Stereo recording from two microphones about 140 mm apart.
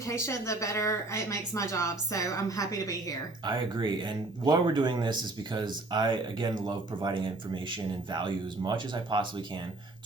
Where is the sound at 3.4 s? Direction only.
35° right (ahead or behind).